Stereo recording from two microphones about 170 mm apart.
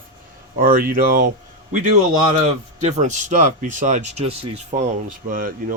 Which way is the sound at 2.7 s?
45° right (ahead or behind).